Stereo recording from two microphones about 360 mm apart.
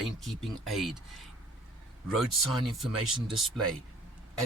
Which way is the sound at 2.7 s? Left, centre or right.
Centre.